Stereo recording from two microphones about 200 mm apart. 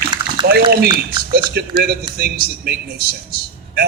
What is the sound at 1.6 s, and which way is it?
A man's voice, 55° right (ahead or behind).